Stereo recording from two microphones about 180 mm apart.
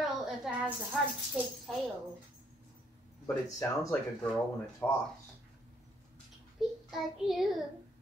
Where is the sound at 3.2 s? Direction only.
15° left (ahead or behind).